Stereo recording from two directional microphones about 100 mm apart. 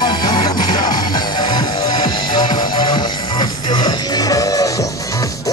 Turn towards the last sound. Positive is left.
turn(degrees=35)  # may be behind; listen again after turning